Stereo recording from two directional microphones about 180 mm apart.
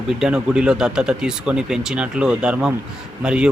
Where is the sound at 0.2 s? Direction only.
5° right (ahead or behind).